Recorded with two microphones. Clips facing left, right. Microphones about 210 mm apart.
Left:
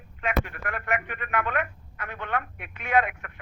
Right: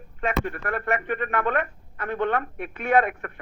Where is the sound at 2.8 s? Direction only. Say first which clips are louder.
Right 4 dB; 55° right (ahead or behind).